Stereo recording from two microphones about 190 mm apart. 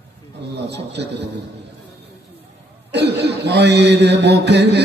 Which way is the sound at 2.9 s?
60° right (ahead or behind).